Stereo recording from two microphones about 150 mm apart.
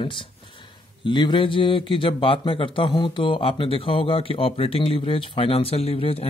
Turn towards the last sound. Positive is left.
turn(degrees=40)  # may be behind; listen again after turning